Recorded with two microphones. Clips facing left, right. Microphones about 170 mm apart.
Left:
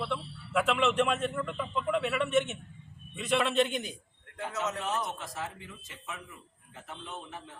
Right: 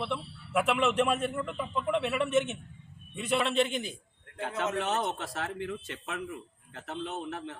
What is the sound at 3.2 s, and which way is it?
Speech, centre (ahead or behind).